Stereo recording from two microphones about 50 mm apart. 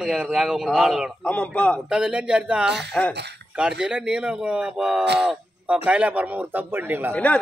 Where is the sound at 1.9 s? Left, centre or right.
Right.